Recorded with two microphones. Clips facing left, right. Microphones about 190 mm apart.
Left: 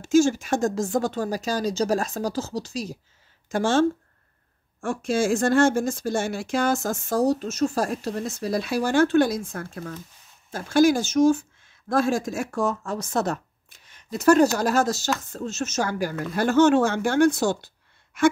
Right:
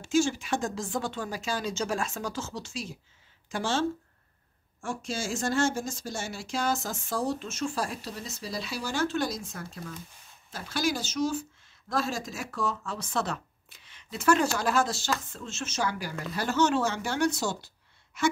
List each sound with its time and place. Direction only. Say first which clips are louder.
0.0 s speech: left 7 dB; 45° left (ahead or behind)
4.8 s speech: left 10 dB; 55° left (ahead or behind)